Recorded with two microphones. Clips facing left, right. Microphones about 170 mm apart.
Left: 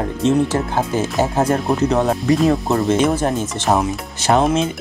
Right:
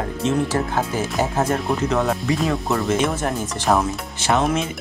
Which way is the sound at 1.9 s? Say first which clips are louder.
Left 4 dB; 35° left (ahead or behind).